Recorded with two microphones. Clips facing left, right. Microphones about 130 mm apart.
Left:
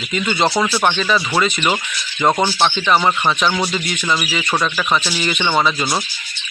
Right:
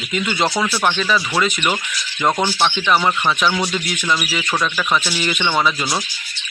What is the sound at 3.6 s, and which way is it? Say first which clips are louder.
Speech: left 1 dB; 5° left (ahead or behind).